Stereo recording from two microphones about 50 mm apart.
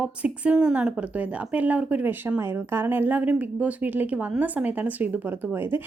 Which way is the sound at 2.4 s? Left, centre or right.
Right.